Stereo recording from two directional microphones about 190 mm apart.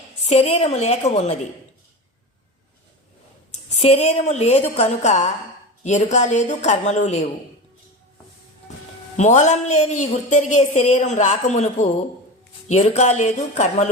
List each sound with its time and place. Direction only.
0.3 s speech: 35° left (ahead or behind)
3.7 s speech: 35° left (ahead or behind)
9.1 s speech: 40° left (ahead or behind)